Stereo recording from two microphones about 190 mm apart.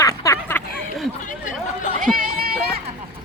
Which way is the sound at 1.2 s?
40° left (ahead or behind).